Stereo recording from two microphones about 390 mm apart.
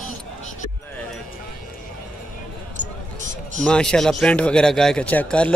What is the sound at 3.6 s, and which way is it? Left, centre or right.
A man's voice, centre.